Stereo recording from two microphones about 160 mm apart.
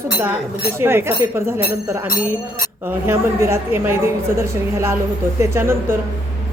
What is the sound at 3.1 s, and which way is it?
A woman's voice, 15° right (ahead or behind).